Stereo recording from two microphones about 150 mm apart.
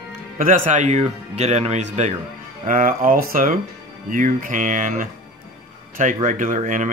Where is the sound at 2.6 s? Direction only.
65° right (ahead or behind).